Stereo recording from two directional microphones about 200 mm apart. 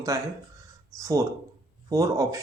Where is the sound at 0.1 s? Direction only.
15° right (ahead or behind).